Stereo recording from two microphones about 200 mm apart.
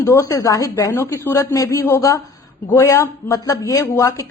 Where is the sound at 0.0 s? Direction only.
15° left (ahead or behind).